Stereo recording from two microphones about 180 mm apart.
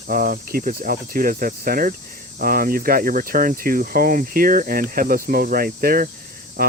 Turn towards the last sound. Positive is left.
turn(degrees=-55)  # may be behind; listen again after turning